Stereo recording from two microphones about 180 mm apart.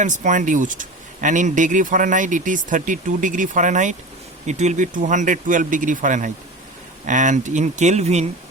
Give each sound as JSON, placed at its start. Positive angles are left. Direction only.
{"t": 0.0, "sound": "speech", "side_deg": -45}